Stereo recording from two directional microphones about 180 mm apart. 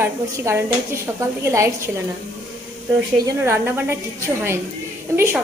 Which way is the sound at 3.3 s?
15° right (ahead or behind).